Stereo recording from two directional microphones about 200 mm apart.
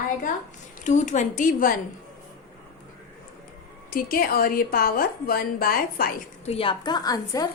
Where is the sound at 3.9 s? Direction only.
45° left (ahead or behind).